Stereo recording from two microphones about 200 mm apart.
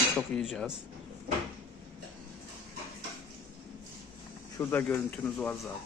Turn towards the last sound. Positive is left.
turn(degrees=5)  # may be behind; listen again after turning